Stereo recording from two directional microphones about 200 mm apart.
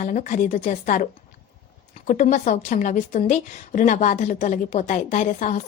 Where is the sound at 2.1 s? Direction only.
40° left (ahead or behind).